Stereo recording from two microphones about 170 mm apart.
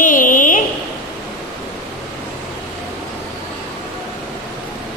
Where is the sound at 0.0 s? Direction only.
50° left (ahead or behind).